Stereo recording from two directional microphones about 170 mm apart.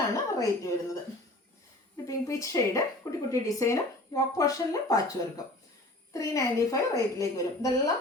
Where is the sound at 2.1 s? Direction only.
20° left (ahead or behind).